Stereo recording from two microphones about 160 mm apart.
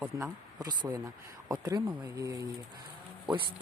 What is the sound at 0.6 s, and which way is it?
Speech, 25° right (ahead or behind).